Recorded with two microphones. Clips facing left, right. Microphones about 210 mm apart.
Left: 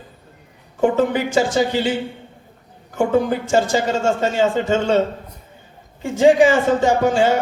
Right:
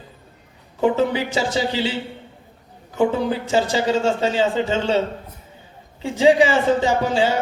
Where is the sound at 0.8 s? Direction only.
50° left (ahead or behind).